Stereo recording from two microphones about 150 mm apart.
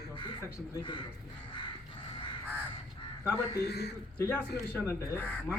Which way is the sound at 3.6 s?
90° left.